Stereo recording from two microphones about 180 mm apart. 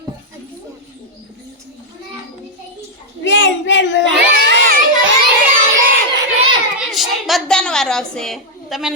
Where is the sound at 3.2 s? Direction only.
80° left.